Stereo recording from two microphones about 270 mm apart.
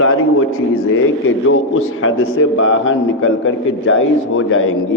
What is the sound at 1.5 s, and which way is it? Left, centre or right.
A man's voice, left.